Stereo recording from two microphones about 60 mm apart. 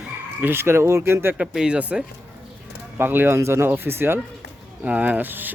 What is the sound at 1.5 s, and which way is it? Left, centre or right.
Speech, centre.